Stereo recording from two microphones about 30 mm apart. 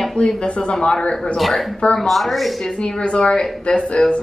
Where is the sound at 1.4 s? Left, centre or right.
Centre.